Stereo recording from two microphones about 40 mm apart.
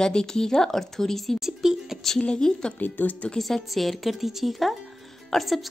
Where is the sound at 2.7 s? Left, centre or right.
Left.